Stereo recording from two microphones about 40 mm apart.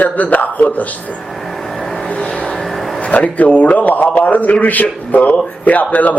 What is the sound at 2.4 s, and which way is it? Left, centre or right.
Vehicle, centre.